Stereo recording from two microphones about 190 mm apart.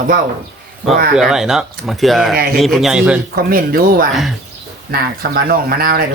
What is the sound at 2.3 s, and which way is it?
Speech, 50° right (ahead or behind).